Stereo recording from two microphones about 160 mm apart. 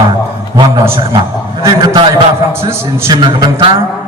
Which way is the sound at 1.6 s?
20° right (ahead or behind).